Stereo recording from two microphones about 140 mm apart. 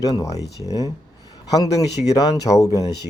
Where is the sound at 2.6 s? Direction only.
25° left (ahead or behind).